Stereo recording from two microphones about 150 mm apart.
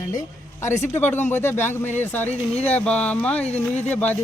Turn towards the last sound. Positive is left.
turn(degrees=10)  # may be behind; listen again after turning